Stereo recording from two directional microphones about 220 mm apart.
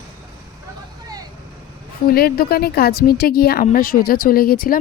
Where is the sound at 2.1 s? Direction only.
45° left (ahead or behind).